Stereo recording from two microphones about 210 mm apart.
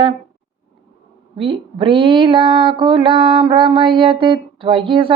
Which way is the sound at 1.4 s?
25° right (ahead or behind).